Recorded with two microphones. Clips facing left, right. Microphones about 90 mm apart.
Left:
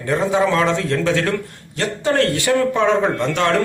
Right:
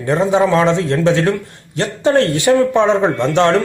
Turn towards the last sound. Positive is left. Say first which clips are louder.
# right 5 dB
turn(degrees=-25)  # may be behind; listen again after turning